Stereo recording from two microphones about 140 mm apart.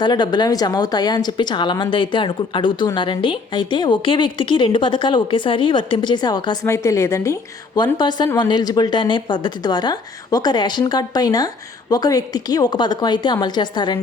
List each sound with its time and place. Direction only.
0.0 s a woman's voice: 30° left (ahead or behind)
7.9 s a woman's voice: 30° left (ahead or behind)